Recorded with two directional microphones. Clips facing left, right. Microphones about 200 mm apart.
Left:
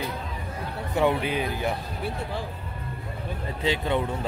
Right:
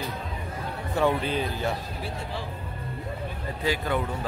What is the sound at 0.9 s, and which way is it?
Speech, 15° left (ahead or behind).